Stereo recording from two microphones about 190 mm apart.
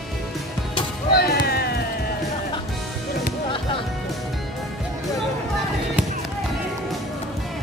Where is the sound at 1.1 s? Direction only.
55° left (ahead or behind).